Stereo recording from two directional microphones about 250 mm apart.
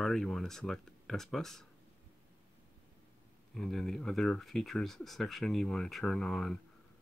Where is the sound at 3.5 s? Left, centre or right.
Centre.